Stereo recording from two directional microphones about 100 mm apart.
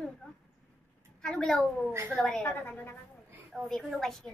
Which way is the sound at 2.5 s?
20° left (ahead or behind).